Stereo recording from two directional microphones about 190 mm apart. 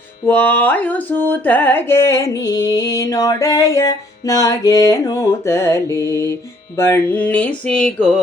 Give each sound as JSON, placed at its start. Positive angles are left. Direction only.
{"t": 0.3, "sound": "music", "side_deg": 10}